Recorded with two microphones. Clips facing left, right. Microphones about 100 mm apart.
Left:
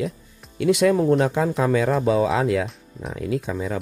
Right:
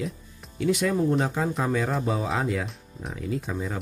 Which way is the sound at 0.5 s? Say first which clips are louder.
Left 6 dB; 70° left (ahead or behind).